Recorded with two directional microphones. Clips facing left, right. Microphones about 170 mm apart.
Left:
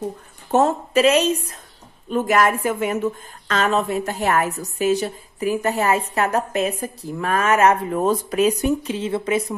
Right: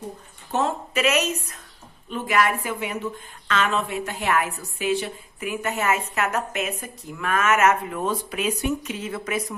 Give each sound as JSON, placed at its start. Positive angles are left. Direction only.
{"t": 0.5, "sound": "a woman's voice", "side_deg": 45}
{"t": 2.0, "sound": "a woman's voice", "side_deg": 45}